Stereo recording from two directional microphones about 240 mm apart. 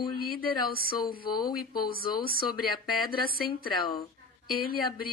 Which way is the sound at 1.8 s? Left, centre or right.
Left.